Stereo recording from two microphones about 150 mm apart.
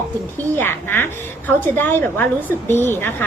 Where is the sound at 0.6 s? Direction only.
15° left (ahead or behind).